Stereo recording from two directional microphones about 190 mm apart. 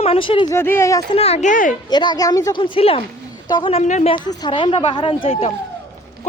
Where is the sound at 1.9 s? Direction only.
25° left (ahead or behind).